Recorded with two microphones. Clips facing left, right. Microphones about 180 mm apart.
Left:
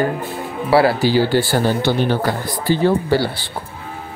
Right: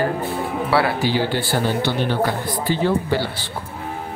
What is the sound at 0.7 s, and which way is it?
Speech, 30° left (ahead or behind).